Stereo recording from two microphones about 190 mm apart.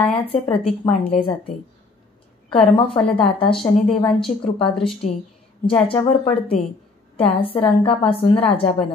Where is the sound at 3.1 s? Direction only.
30° left (ahead or behind).